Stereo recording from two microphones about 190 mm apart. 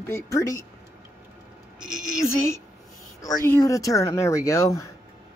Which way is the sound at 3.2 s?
15° left (ahead or behind).